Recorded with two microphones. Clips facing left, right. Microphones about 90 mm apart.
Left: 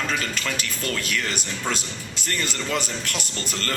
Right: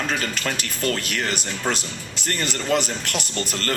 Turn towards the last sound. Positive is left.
turn(degrees=-45)  # may be behind; listen again after turning